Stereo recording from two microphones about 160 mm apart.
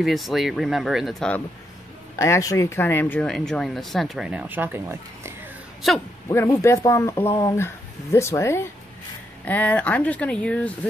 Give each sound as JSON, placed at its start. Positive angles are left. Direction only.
{"t": 0.0, "sound": "speech", "side_deg": 0}
{"t": 2.1, "sound": "speech", "side_deg": 20}
{"t": 5.8, "sound": "speech", "side_deg": 0}
{"t": 6.2, "sound": "speech", "side_deg": 15}